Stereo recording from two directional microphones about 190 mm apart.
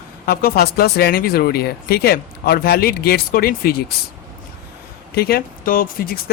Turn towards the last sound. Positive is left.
turn(degrees=50)  # may be behind; listen again after turning